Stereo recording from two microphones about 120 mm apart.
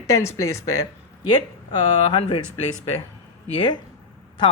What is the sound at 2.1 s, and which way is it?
Speech, 50° left (ahead or behind).